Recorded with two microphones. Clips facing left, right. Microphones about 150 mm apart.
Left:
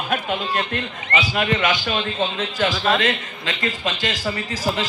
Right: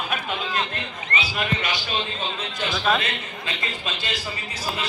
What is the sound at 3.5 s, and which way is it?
A man's voice, 90° left.